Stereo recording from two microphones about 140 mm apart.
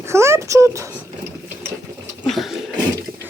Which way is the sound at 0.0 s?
20° right (ahead or behind).